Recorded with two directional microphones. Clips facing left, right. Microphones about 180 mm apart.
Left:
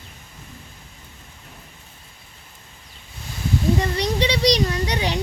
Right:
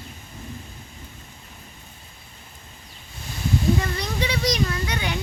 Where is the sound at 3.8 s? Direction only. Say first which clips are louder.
Left 5 dB; 35° left (ahead or behind).